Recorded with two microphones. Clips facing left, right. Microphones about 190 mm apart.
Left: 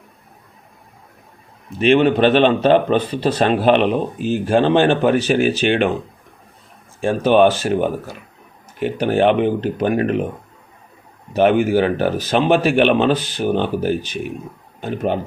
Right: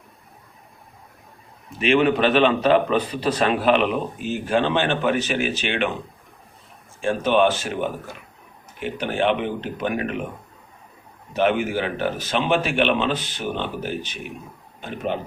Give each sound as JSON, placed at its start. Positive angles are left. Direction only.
{"t": 1.8, "sound": "a man's voice", "side_deg": 30}
{"t": 7.0, "sound": "a man's voice", "side_deg": 40}
{"t": 11.3, "sound": "a man's voice", "side_deg": 45}